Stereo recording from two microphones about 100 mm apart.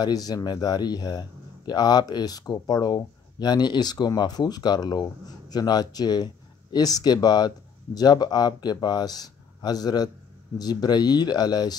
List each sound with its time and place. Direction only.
0.0 s speech: 40° left (ahead or behind)